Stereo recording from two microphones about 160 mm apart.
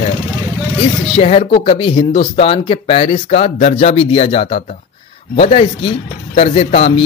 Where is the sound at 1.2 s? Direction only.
40° left (ahead or behind).